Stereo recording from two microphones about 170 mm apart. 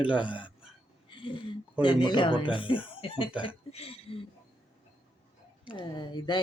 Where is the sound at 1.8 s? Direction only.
25° left (ahead or behind).